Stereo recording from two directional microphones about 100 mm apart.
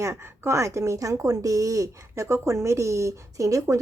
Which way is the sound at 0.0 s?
30° right (ahead or behind).